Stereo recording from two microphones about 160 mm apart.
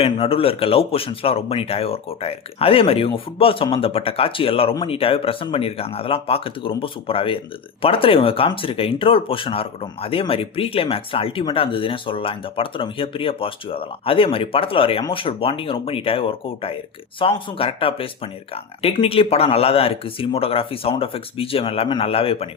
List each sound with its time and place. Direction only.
0.0 s speech: 35° left (ahead or behind)